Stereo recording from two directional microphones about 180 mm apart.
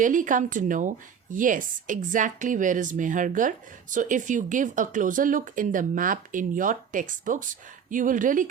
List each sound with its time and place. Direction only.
0.0 s speech: 45° right (ahead or behind)